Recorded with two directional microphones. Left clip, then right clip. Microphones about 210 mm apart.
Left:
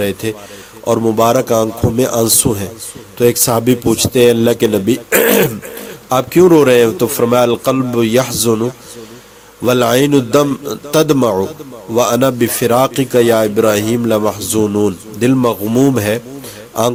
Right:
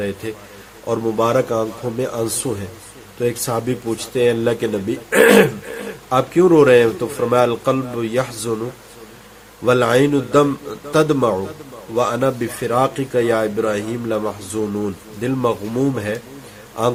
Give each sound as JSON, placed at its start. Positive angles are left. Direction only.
{"t": 0.0, "sound": "a man's voice", "side_deg": 45}
{"t": 9.6, "sound": "a man's voice", "side_deg": 45}